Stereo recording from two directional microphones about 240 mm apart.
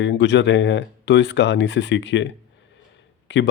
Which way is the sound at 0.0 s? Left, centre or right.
Left.